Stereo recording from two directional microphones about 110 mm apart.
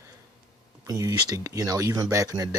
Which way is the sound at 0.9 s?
30° right (ahead or behind).